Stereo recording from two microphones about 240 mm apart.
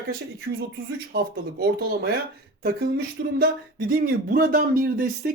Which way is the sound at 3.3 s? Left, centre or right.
Right.